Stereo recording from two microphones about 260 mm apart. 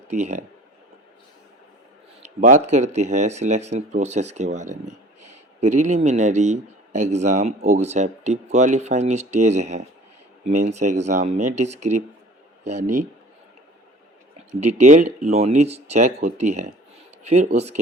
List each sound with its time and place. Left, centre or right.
0.1 s speech: right
2.2 s speech: right
12.6 s a man's voice: right
14.5 s speech: right